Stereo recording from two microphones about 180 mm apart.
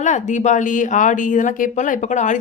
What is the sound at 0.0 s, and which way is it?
Speech, 40° left (ahead or behind).